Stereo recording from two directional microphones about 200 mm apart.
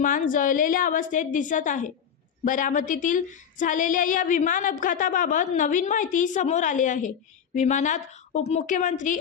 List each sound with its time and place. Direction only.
0.0 s speech: 40° left (ahead or behind)